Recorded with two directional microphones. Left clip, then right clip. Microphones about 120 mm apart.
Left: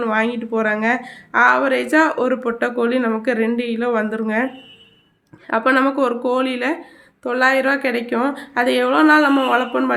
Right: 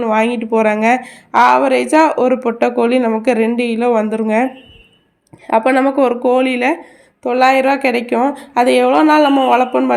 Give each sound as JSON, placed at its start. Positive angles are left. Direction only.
{"t": 0.1, "sound": "a woman's voice", "side_deg": -30}
{"t": 5.5, "sound": "a woman's voice", "side_deg": -25}